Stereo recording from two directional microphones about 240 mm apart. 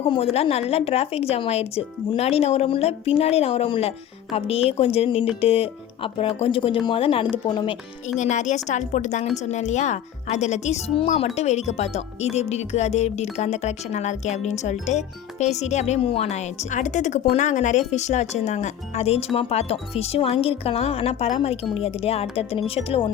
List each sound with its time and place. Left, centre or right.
0.3 s speech: left